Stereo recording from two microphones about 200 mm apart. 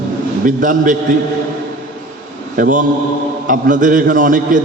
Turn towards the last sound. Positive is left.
turn(degrees=-40)  # may be behind; listen again after turning